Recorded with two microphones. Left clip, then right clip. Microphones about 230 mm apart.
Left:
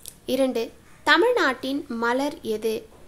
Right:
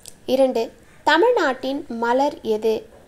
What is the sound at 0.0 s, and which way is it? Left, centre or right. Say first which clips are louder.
A child's voice: right 6 dB; left.